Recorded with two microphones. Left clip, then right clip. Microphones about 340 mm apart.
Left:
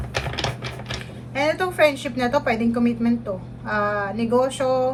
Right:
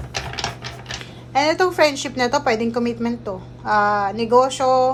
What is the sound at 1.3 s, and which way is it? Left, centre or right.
A woman's voice, centre.